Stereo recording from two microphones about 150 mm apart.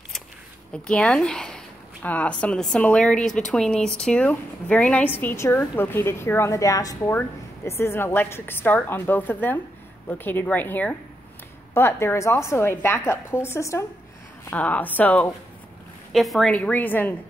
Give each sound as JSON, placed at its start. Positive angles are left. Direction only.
{"t": 0.8, "sound": "a woman's voice", "side_deg": 5}
{"t": 16.1, "sound": "a woman's voice", "side_deg": 0}